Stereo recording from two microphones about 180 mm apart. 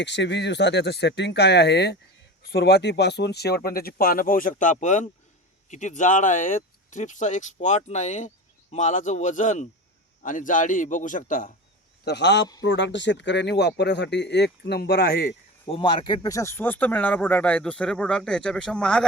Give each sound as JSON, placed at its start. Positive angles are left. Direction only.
{"t": 0.0, "sound": "speech", "side_deg": 75}
{"t": 12.0, "sound": "speech", "side_deg": 70}
{"t": 15.7, "sound": "speech", "side_deg": 30}